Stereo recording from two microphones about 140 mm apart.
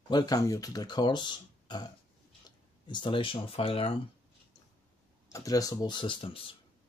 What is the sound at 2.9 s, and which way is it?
Speech, 35° left (ahead or behind).